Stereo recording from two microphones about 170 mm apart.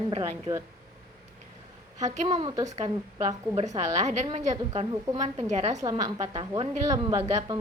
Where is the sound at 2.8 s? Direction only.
35° right (ahead or behind).